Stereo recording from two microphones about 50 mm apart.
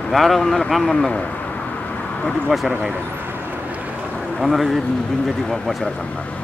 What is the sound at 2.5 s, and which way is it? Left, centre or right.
Speech, centre.